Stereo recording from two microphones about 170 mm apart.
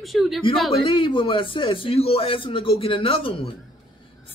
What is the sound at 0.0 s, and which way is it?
Speech, centre (ahead or behind).